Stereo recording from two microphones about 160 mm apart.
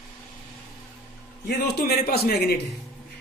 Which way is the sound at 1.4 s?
90° left.